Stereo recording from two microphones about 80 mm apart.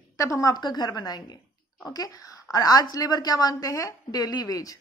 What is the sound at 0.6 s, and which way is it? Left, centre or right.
A woman's voice, left.